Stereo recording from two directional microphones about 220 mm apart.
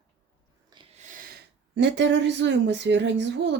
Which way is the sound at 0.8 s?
35° right (ahead or behind).